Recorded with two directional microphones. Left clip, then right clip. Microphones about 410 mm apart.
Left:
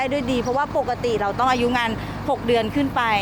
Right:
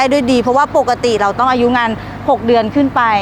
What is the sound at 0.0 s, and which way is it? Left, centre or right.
Speech, right.